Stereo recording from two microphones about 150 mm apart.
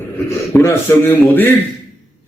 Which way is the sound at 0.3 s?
20° left (ahead or behind).